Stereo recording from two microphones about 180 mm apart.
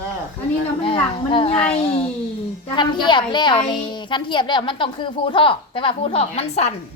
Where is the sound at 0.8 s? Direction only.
30° left (ahead or behind).